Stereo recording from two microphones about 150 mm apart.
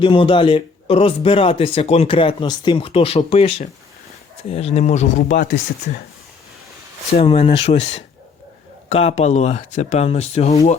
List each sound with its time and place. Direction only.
0.0 s a man's voice: 35° left (ahead or behind)
4.5 s speech: 40° left (ahead or behind)
5.4 s speech: 75° left (ahead or behind)
7.1 s a man's voice: 40° left (ahead or behind)